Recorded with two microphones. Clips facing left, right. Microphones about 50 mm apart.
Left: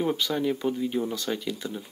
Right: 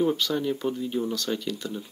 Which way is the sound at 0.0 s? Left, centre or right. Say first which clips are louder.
Right 1 dB; centre.